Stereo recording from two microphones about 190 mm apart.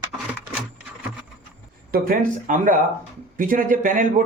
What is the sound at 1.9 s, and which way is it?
Speech, 50° right (ahead or behind).